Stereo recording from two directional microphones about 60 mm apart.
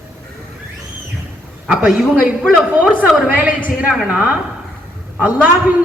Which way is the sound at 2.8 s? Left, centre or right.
Right.